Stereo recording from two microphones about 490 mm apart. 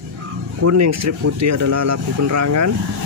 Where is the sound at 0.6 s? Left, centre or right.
Right.